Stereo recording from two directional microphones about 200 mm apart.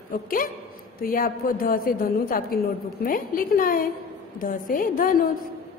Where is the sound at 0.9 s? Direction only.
45° left (ahead or behind).